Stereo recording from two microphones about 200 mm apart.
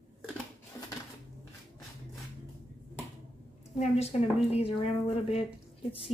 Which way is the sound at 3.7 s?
35° left (ahead or behind).